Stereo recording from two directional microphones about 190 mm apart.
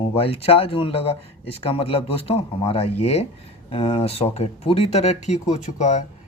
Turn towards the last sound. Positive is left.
turn(degrees=40)  # may be behind; listen again after turning